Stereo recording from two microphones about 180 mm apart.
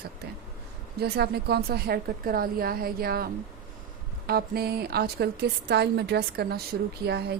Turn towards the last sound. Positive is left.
turn(degrees=-65)  # may be behind; listen again after turning